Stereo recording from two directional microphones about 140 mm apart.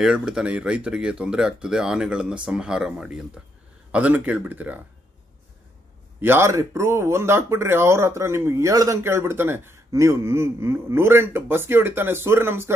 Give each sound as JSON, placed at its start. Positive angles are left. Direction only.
{"t": 0.0, "sound": "speech", "side_deg": -5}
{"t": 6.2, "sound": "speech", "side_deg": -20}